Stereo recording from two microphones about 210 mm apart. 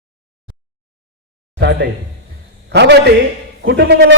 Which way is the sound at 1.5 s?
55° right (ahead or behind).